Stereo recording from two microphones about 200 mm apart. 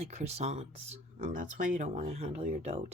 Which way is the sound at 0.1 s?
35° right (ahead or behind).